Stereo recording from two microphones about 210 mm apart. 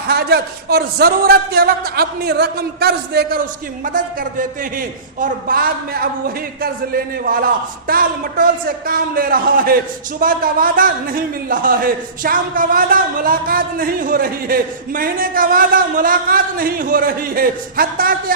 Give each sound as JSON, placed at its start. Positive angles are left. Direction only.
{"t": 0.1, "sound": "a man's voice", "side_deg": -50}